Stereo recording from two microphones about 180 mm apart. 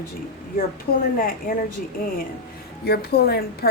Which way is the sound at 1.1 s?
55° left (ahead or behind).